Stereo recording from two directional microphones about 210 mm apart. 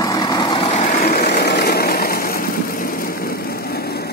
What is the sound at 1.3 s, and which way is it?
Vehicle, 50° left (ahead or behind).